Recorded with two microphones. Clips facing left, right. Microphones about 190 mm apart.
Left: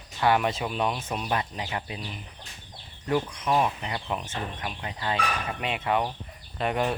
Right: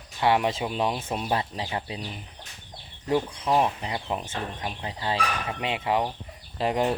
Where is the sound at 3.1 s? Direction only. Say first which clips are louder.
Right 1 dB; 25° right (ahead or behind).